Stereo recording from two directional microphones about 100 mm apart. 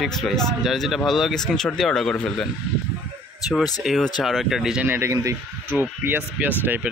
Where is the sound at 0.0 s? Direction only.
5° left (ahead or behind).